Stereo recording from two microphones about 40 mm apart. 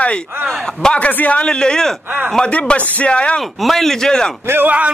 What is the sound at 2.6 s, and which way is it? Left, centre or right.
Speech, left.